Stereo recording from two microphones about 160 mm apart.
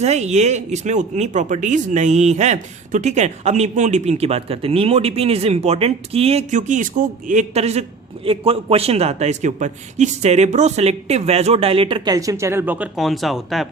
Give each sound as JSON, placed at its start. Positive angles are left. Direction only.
{"t": 0.0, "sound": "speech", "side_deg": -45}
{"t": 13.0, "sound": "speech", "side_deg": 0}